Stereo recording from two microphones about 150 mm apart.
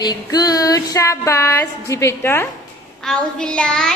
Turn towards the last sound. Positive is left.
turn(degrees=5)  # may be behind; listen again after turning